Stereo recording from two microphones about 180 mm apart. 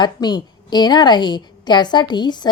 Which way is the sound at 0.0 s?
25° left (ahead or behind).